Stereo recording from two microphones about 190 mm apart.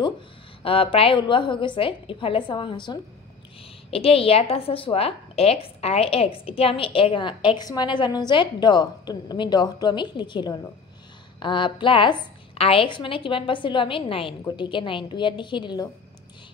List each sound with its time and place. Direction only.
0.6 s a woman's voice: 30° left (ahead or behind)